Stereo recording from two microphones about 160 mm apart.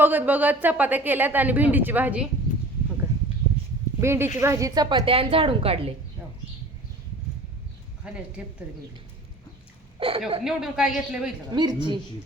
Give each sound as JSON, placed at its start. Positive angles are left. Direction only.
{"t": 0.0, "sound": "speech", "side_deg": -10}
{"t": 4.0, "sound": "a woman's voice", "side_deg": -15}
{"t": 8.0, "sound": "speech", "side_deg": -5}
{"t": 10.0, "sound": "a woman's voice", "side_deg": -35}
{"t": 10.4, "sound": "speech", "side_deg": -5}
{"t": 11.5, "sound": "a woman's voice", "side_deg": -25}